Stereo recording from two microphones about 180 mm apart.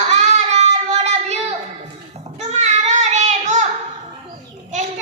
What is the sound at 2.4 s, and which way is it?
Child singing, 40° right (ahead or behind).